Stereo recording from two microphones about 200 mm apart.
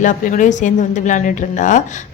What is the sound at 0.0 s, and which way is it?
A woman's voice, 40° left (ahead or behind).